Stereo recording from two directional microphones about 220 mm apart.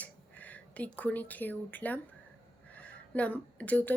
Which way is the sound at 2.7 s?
5° left (ahead or behind).